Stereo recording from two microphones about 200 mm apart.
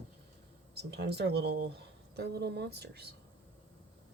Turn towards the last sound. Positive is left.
turn(degrees=-55)  # may be behind; listen again after turning